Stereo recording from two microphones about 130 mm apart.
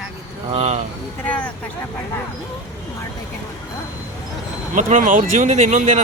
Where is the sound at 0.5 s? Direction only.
50° right (ahead or behind).